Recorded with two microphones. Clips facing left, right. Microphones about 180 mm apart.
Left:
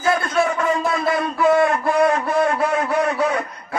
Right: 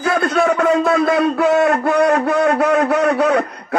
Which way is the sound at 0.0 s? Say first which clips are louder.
Right 3 dB; 65° right (ahead or behind).